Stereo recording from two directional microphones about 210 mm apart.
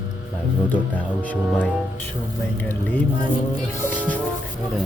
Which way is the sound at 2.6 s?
10° left (ahead or behind).